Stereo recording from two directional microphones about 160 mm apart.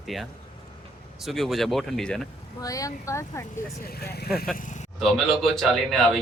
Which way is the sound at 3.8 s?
80° left.